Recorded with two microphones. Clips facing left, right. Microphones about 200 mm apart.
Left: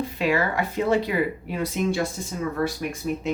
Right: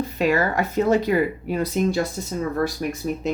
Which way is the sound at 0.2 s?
45° right (ahead or behind).